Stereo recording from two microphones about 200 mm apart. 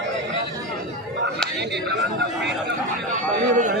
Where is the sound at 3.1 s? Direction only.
40° right (ahead or behind).